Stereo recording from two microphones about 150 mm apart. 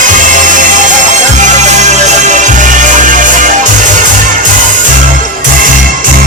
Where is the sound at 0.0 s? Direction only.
60° right (ahead or behind).